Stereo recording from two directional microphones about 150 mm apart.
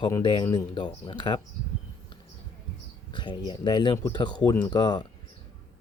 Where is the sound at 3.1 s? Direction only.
30° left (ahead or behind).